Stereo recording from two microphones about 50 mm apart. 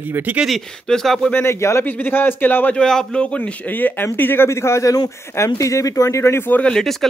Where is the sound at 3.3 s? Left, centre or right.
Left.